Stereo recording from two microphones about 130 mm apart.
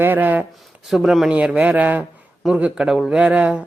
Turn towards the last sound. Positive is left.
turn(degrees=-10)  # may be behind; listen again after turning